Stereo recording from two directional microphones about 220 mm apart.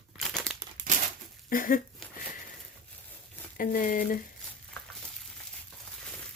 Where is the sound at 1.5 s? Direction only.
40° left (ahead or behind).